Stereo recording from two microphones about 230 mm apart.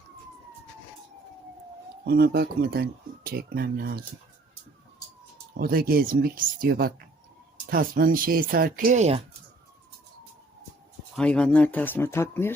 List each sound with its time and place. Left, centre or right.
2.0 s speech: right
5.5 s speech: right
11.1 s speech: centre